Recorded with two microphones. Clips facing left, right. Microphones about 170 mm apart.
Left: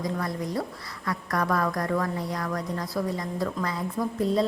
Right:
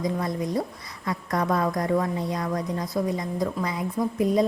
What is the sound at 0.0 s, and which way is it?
A woman's voice, 20° right (ahead or behind).